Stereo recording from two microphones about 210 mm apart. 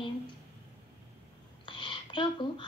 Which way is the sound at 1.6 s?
25° left (ahead or behind).